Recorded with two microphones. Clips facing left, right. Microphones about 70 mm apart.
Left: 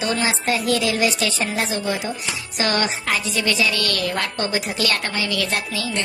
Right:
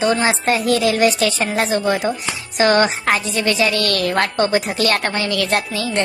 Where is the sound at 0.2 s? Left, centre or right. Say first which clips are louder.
Right 4 dB; right.